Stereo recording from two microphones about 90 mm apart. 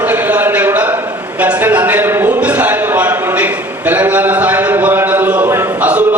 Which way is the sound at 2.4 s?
15° right (ahead or behind).